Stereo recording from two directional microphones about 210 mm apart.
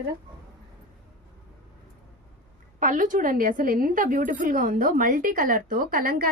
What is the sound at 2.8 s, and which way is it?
A woman's voice, 40° right (ahead or behind).